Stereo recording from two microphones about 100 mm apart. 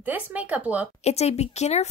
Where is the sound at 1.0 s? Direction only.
90° left.